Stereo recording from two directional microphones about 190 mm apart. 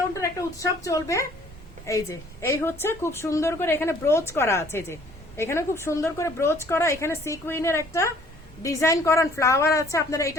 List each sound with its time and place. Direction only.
0.1 s a woman's voice: 15° left (ahead or behind)